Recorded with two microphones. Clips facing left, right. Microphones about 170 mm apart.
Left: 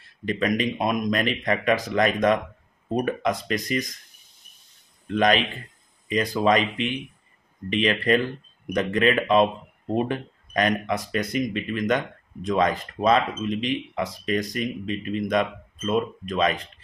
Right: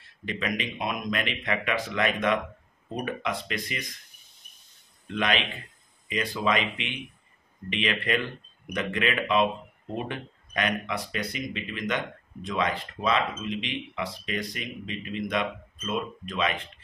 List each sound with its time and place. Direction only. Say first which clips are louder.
0.2 s speech: left 7 dB; 40° left (ahead or behind)
5.1 s speech: left 7 dB; 40° left (ahead or behind)